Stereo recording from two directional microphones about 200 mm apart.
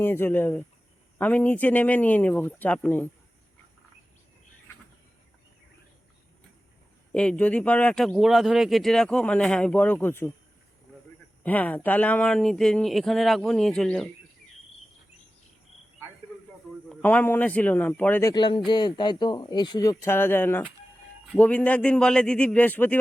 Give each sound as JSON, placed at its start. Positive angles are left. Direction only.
{"t": 0.0, "sound": "a man's voice", "side_deg": 10}
{"t": 7.1, "sound": "speech", "side_deg": 5}
{"t": 11.4, "sound": "speech", "side_deg": 10}
{"t": 16.9, "sound": "a man's voice", "side_deg": 10}